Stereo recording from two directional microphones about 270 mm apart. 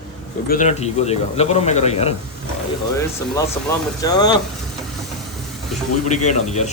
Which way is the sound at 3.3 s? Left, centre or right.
Centre.